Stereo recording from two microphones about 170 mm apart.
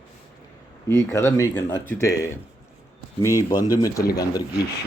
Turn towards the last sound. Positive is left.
turn(degrees=20)  # may be behind; listen again after turning